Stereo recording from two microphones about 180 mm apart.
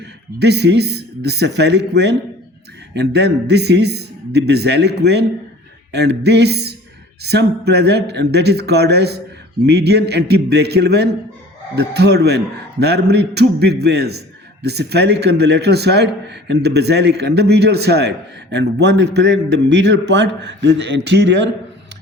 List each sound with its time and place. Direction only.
0.3 s a man's voice: 65° right (ahead or behind)